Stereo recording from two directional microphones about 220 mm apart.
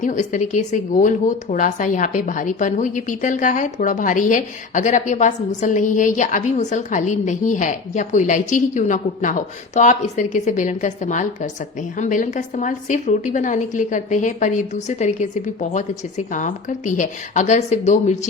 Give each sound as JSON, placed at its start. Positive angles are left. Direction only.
{"t": 0.0, "sound": "speech", "side_deg": 35}